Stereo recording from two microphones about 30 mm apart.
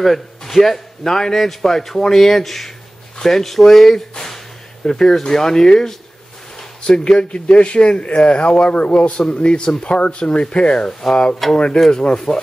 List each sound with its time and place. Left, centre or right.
0.0 s a man's voice: centre
6.8 s a man's voice: left
9.3 s speech: left
10.9 s a man's voice: centre
11.4 s speech: centre
11.9 s speech: left